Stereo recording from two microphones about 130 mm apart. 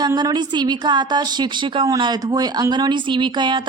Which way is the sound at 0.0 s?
30° right (ahead or behind).